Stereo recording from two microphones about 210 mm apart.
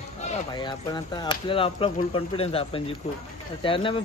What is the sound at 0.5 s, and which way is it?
Speech, 20° left (ahead or behind).